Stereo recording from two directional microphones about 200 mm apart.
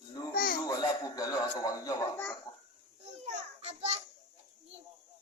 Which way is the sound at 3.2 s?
30° right (ahead or behind).